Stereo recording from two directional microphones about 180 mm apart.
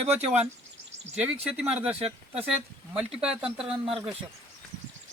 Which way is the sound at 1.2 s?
5° right (ahead or behind).